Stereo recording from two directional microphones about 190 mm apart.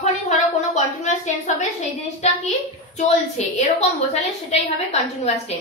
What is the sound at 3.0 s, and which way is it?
A woman's voice, 35° left (ahead or behind).